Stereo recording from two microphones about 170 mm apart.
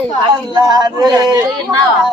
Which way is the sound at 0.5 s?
25° right (ahead or behind).